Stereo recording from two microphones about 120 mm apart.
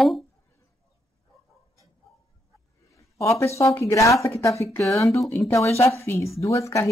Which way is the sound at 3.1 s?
25° left (ahead or behind).